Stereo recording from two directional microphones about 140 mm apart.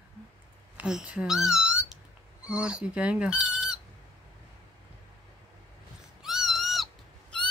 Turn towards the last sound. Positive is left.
turn(degrees=5)  # may be behind; listen again after turning